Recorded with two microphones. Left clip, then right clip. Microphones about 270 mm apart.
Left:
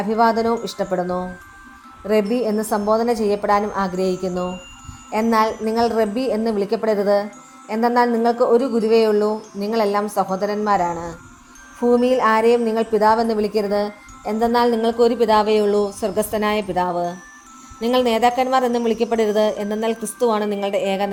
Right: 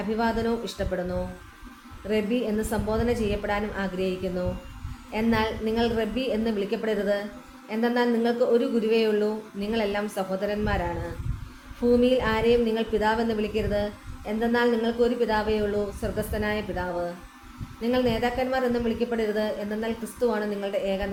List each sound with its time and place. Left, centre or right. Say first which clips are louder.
0.2 s a woman's voice: left 11 dB; left
2.6 s a woman's voice: left 9 dB; left